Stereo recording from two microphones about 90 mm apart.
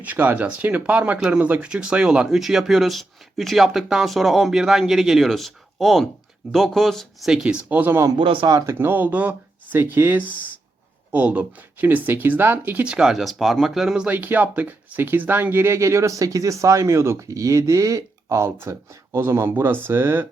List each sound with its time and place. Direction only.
0.0 s speech: 20° right (ahead or behind); by 7.3 s centre (ahead or behind)
7.3 s speech: 10° right (ahead or behind)
8.2 s speech: 75° right (ahead or behind)
8.4 s speech: 40° right (ahead or behind)
8.8 s speech: 20° right (ahead or behind)
12.8 s speech: 10° right (ahead or behind); by 20.2 s 30° right (ahead or behind)